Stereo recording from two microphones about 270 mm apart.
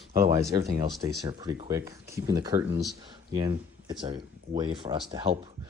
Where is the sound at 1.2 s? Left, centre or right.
Centre.